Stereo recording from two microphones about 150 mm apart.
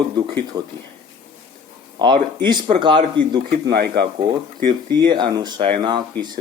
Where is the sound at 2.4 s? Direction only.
30° right (ahead or behind).